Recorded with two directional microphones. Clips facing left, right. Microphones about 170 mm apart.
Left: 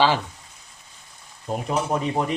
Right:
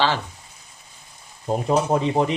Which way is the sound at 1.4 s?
30° right (ahead or behind).